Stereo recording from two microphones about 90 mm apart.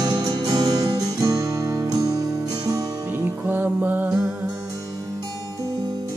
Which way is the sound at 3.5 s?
20° right (ahead or behind).